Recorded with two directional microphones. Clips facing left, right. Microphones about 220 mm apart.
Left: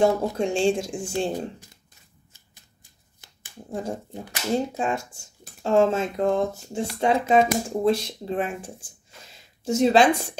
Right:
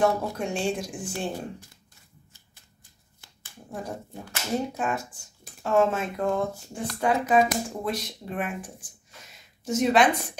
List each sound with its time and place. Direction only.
0.0 s speech: 30° left (ahead or behind)
3.2 s finger snapping: 25° left (ahead or behind)
4.3 s speech: 25° left (ahead or behind)